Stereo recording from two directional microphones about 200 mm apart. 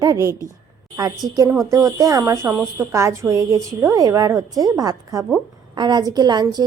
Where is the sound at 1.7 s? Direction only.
15° right (ahead or behind).